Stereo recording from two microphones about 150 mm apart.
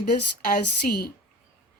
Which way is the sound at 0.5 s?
90° left.